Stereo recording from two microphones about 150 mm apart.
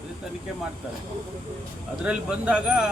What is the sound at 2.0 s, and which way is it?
Speech, 5° right (ahead or behind).